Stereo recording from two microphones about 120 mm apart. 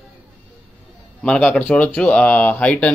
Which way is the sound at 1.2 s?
10° left (ahead or behind).